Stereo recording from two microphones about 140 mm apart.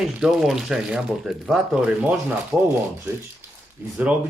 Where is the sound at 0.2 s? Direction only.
Centre (ahead or behind).